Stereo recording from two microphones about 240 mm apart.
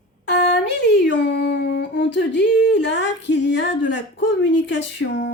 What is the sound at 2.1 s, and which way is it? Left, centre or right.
Speech, left.